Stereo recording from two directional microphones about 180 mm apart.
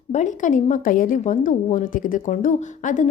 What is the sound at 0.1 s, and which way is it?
A woman's voice, 40° left (ahead or behind).